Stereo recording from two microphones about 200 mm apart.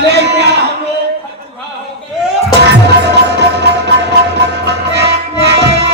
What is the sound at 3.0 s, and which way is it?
Music, 55° right (ahead or behind).